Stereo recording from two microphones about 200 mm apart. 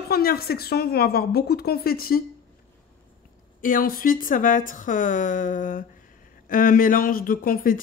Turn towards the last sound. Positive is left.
turn(degrees=45)  # may be behind; listen again after turning